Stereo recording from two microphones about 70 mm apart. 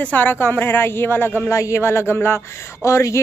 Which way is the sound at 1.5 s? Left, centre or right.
Left.